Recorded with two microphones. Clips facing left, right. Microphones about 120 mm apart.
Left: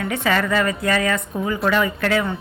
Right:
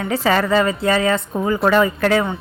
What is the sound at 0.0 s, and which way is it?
A woman's voice, 35° right (ahead or behind).